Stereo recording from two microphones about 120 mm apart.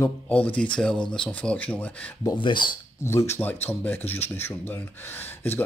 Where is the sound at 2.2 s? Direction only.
40° left (ahead or behind).